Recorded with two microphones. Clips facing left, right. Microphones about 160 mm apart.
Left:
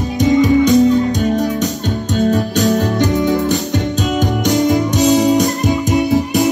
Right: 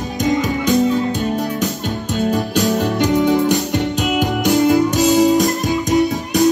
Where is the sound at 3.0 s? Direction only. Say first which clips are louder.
Even; 15° right (ahead or behind).